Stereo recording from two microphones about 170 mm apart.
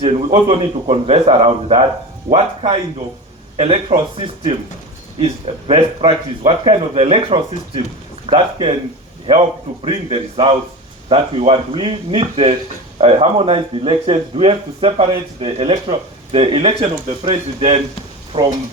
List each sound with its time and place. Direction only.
0.0 s speech: 40° right (ahead or behind)
0.3 s speech: 30° right (ahead or behind)
9.8 s speech: 30° right (ahead or behind)